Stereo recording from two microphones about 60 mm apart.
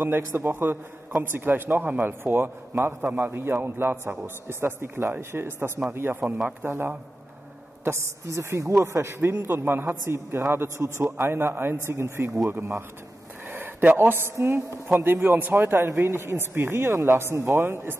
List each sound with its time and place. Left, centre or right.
0.0 s a woman's voice: right
2.0 s a woman's voice: right
3.0 s a woman's voice: right
8.3 s a man's voice: right